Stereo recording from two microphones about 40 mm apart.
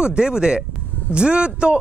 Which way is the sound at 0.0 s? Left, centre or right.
Right.